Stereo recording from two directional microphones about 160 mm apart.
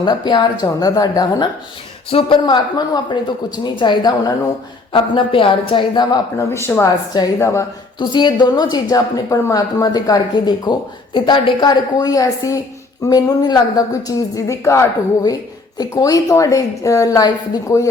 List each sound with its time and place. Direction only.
0.0 s a woman's voice: 30° left (ahead or behind)
6.5 s a woman's voice: 15° left (ahead or behind)
7.9 s a woman's voice: 30° left (ahead or behind)